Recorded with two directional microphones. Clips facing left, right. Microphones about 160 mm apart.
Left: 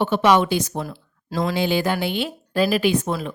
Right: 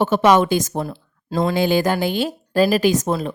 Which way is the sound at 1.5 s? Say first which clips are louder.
Right 3 dB; 45° right (ahead or behind).